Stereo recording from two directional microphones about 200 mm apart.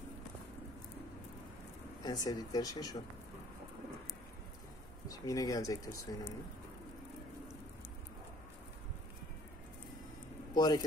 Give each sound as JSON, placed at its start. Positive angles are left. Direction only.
{"t": 2.0, "sound": "speech", "side_deg": 20}
{"t": 5.0, "sound": "speech", "side_deg": 15}
{"t": 10.5, "sound": "a man's voice", "side_deg": 20}